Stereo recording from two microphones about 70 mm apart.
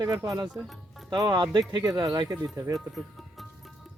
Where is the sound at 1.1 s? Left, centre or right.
Right.